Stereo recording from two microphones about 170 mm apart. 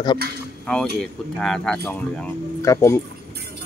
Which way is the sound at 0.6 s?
5° left (ahead or behind).